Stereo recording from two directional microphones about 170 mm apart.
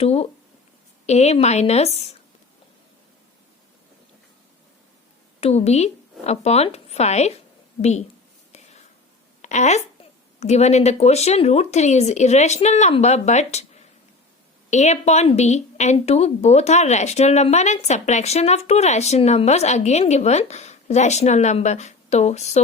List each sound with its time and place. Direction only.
0.0 s a woman's voice: 35° left (ahead or behind)
5.4 s a woman's voice: 40° left (ahead or behind)
8.5 s whispering: 40° left (ahead or behind)
9.4 s a woman's voice: 45° left (ahead or behind)